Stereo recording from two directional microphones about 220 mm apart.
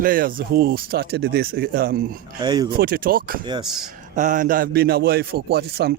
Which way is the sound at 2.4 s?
15° right (ahead or behind).